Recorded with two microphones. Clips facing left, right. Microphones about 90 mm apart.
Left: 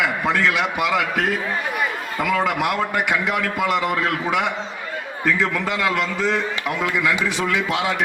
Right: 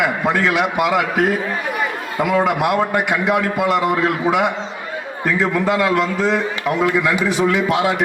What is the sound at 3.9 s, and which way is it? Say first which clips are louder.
A man's voice: right 4 dB; 15° right (ahead or behind).